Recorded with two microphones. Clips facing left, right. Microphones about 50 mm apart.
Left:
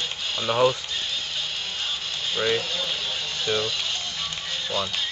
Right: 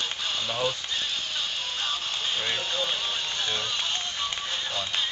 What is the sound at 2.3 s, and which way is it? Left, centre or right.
Speech, left.